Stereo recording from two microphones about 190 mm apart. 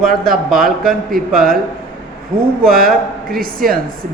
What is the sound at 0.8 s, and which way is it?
Speech, 50° right (ahead or behind).